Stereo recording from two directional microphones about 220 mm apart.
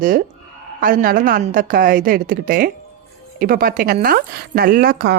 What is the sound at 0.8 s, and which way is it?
A woman's voice, 40° right (ahead or behind).